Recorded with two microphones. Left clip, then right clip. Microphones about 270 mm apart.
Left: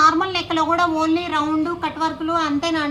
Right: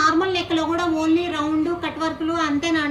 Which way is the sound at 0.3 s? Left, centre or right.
Centre.